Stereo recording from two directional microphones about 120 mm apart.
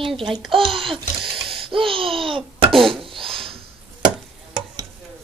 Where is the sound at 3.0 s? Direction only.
50° right (ahead or behind).